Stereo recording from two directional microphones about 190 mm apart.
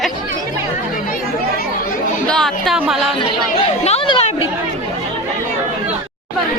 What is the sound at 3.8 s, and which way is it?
Speech, 35° left (ahead or behind).